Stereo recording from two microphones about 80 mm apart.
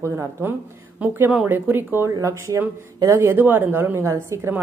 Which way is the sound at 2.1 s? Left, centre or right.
Right.